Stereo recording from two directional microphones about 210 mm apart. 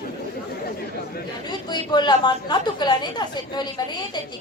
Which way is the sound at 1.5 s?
20° left (ahead or behind).